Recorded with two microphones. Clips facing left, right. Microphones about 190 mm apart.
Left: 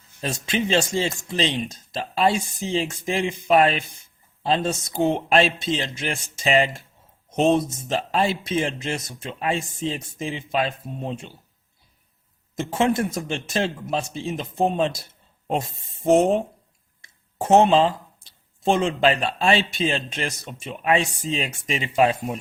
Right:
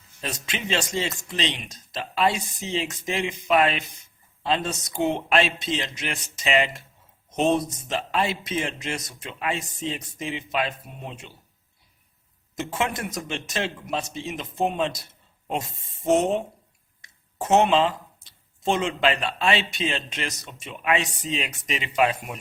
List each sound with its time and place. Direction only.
0.2 s speech: 35° left (ahead or behind)
7.3 s speech: centre (ahead or behind)
7.6 s speech: 25° left (ahead or behind)
12.5 s speech: 30° left (ahead or behind)
17.0 s speech: 30° left (ahead or behind)